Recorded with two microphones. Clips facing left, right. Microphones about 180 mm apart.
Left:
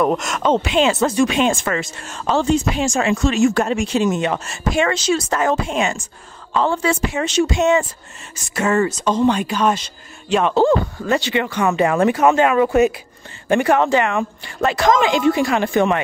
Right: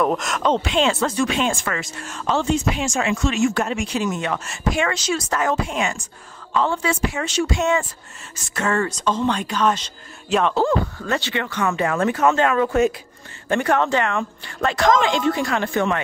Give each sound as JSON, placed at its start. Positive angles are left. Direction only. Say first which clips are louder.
{"t": 0.0, "sound": "speech", "louder": "left 2 dB", "side_deg": 0}
{"t": 0.9, "sound": "speech", "louder": "left 4 dB", "side_deg": 15}
{"t": 6.5, "sound": "a woman's voice", "louder": "left 3 dB", "side_deg": 35}
{"t": 7.1, "sound": "speech", "louder": "left 4 dB", "side_deg": 20}
{"t": 8.5, "sound": "speech", "louder": "left 4 dB", "side_deg": 10}
{"t": 10.5, "sound": "speech", "louder": "left 5 dB", "side_deg": 25}